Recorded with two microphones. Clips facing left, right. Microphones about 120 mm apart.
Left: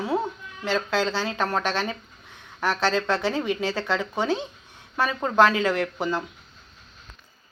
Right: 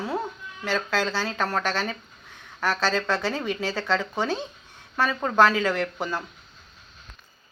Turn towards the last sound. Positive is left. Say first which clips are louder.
# left 2 dB
turn(degrees=15)  # may be behind; listen again after turning